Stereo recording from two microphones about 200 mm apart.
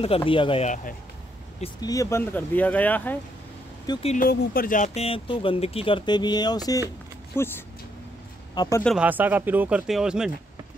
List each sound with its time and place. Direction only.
0.0 s speech: 25° left (ahead or behind)
1.6 s speech: 20° left (ahead or behind)
3.8 s speech: 20° left (ahead or behind)
4.1 s speech: 45° left (ahead or behind); by 8.8 s 15° left (ahead or behind)
8.8 s speech: 5° right (ahead or behind)